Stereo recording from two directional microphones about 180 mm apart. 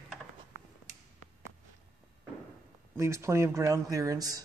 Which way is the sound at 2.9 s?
15° right (ahead or behind).